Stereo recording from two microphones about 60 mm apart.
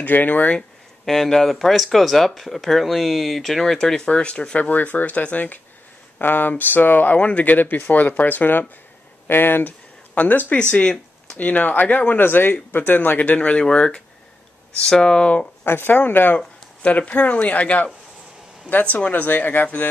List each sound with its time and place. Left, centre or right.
0.0 s speech: left
0.6 s speech: centre
4.6 s speech: left
15.6 s speech: left